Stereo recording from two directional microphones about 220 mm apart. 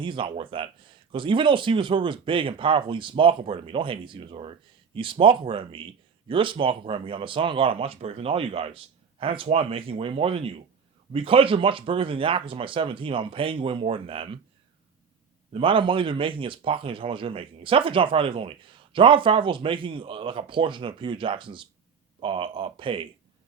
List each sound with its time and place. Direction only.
0.0 s speech: 25° right (ahead or behind)
15.5 s speech: 25° right (ahead or behind)